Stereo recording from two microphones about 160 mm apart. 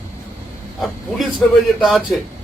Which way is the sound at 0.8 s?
Centre (ahead or behind).